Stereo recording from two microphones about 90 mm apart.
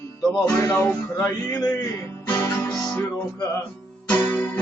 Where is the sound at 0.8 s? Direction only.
35° left (ahead or behind).